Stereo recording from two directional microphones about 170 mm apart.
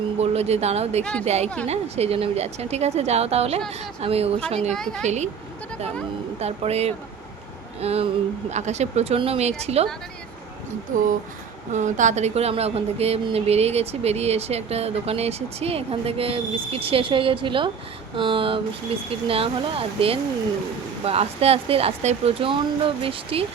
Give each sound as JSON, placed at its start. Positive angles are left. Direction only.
{"t": 0.2, "sound": "speech", "side_deg": -40}
{"t": 4.7, "sound": "a woman's voice", "side_deg": 5}
{"t": 5.0, "sound": "speech", "side_deg": -40}
{"t": 6.4, "sound": "speech", "side_deg": -40}
{"t": 10.9, "sound": "speech", "side_deg": -50}